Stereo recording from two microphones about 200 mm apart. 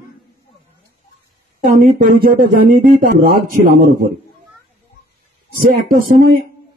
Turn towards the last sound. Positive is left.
turn(degrees=-45)  # may be behind; listen again after turning